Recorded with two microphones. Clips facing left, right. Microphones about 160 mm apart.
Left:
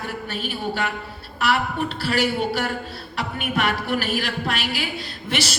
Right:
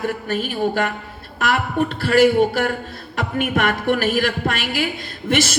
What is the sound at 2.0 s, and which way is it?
Music, 50° right (ahead or behind).